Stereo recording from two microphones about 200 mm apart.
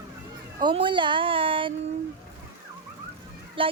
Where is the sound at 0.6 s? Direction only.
25° right (ahead or behind).